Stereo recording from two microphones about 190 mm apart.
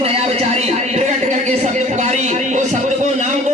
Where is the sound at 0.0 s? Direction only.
35° right (ahead or behind).